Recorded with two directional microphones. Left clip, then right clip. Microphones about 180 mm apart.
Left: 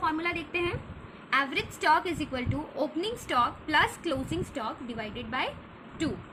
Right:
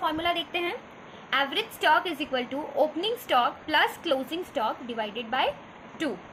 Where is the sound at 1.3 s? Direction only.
Centre (ahead or behind).